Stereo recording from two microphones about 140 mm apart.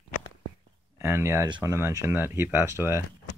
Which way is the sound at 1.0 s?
15° right (ahead or behind).